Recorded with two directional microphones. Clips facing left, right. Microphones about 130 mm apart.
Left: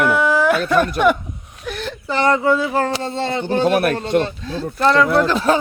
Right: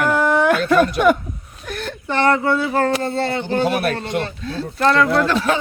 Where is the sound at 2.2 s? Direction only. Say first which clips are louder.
Left 1 dB; 15° left (ahead or behind).